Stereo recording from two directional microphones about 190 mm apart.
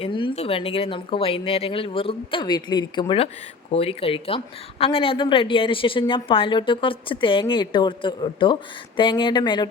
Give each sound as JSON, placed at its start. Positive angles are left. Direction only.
{"t": 0.0, "sound": "a woman's voice", "side_deg": 25}